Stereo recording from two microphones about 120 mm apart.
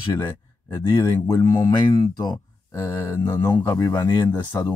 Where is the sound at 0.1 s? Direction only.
25° left (ahead or behind).